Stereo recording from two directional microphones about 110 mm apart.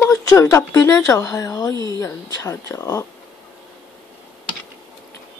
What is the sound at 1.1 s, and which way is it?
Speech, 25° left (ahead or behind).